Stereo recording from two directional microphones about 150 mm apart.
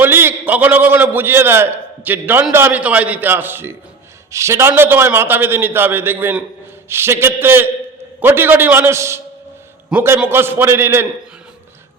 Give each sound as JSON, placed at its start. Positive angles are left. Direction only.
{"t": 0.0, "sound": "a man's voice", "side_deg": -15}